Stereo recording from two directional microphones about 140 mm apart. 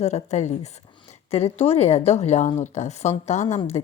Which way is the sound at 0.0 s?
50° left (ahead or behind).